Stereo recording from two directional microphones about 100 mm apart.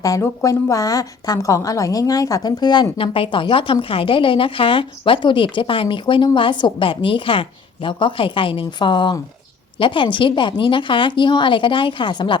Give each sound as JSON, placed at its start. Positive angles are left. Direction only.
{"t": 0.0, "sound": "a woman's voice", "side_deg": 35}
{"t": 3.0, "sound": "a woman's voice", "side_deg": 65}